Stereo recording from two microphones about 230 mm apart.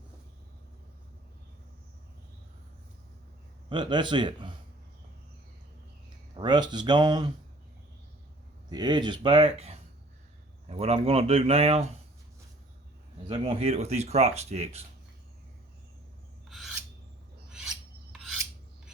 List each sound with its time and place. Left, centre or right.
3.7 s speech: centre
6.3 s speech: centre
8.7 s speech: centre
13.2 s speech: right
16.5 s filing: centre
18.1 s filing: centre